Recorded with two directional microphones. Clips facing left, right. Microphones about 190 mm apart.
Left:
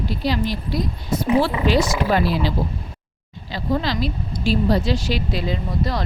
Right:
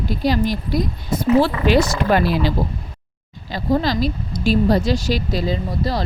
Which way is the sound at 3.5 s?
40° right (ahead or behind).